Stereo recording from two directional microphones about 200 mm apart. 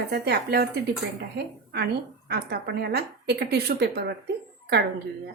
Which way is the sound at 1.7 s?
55° right (ahead or behind).